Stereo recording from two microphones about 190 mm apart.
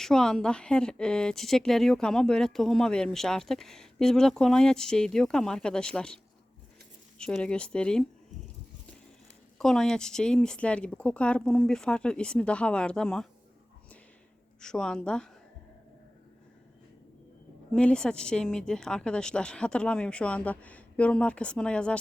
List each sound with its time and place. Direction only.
0.0 s a woman's voice: 5° left (ahead or behind)
7.2 s a woman's voice: 5° left (ahead or behind)
9.6 s a woman's voice: centre (ahead or behind)
14.6 s a woman's voice: 5° left (ahead or behind)
17.7 s a woman's voice: 5° left (ahead or behind)